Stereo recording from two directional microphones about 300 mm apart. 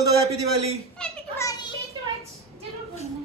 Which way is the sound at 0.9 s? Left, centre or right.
Centre.